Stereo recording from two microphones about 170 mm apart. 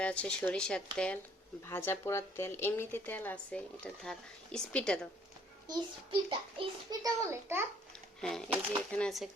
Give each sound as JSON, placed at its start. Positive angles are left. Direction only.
{"t": 0.0, "sound": "a woman's voice", "side_deg": 5}
{"t": 5.6, "sound": "a child's voice", "side_deg": -25}
{"t": 7.3, "sound": "a child's voice", "side_deg": -15}
{"t": 8.2, "sound": "speech", "side_deg": 5}